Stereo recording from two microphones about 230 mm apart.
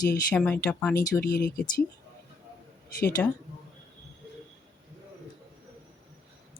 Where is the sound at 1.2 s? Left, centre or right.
Left.